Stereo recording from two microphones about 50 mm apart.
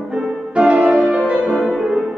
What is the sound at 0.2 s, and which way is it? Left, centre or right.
Music, centre.